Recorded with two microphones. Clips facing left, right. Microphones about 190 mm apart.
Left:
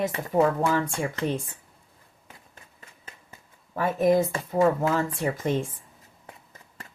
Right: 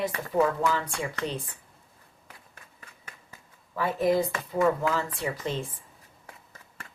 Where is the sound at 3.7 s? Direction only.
45° left (ahead or behind).